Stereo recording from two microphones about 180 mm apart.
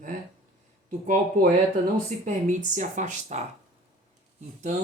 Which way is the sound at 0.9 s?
45° right (ahead or behind).